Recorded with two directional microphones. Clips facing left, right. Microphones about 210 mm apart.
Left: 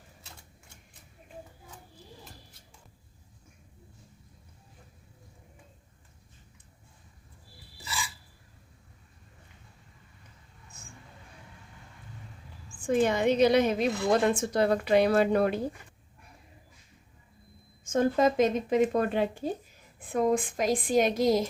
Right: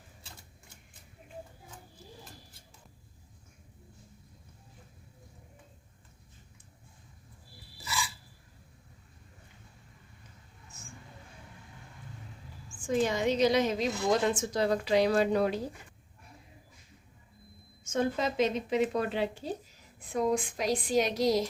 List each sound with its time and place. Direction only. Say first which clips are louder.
12.8 s a woman's voice: left 3 dB; 55° left (ahead or behind)
17.8 s speech: left 6 dB; 50° left (ahead or behind)